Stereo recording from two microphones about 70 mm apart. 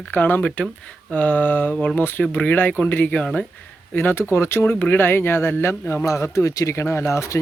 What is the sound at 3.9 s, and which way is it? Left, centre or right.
Speech, left.